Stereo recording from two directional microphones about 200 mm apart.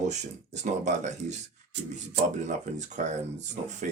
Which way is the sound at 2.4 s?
35° right (ahead or behind).